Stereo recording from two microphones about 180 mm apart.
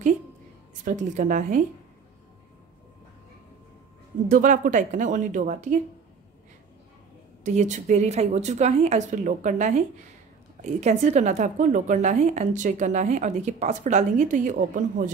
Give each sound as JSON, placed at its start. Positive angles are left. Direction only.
{"t": 0.8, "sound": "a woman's voice", "side_deg": -45}
{"t": 4.3, "sound": "a woman's voice", "side_deg": -45}
{"t": 7.4, "sound": "a woman's voice", "side_deg": -40}